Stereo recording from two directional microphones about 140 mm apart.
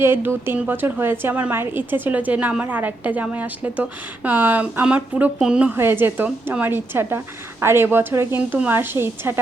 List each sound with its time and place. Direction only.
0.0 s a woman's voice: 15° right (ahead or behind)